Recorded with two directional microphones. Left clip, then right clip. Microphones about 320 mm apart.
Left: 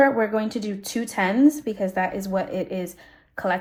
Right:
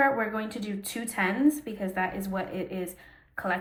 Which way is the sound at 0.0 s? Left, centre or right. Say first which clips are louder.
Left 6 dB; centre.